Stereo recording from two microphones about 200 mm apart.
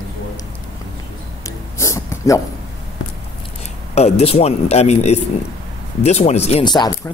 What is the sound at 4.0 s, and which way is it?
Speech, 30° left (ahead or behind).